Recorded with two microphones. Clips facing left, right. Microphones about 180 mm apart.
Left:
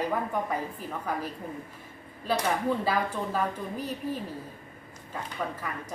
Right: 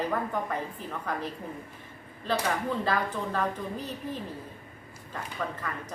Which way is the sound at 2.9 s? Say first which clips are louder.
Left 1 dB; 10° left (ahead or behind).